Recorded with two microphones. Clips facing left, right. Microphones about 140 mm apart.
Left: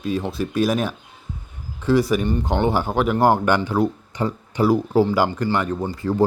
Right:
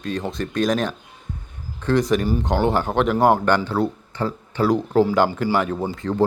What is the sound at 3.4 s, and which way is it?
Speech, 10° left (ahead or behind).